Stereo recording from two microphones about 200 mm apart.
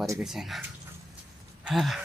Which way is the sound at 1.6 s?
Centre (ahead or behind).